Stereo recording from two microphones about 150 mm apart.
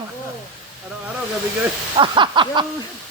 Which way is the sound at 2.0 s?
30° right (ahead or behind).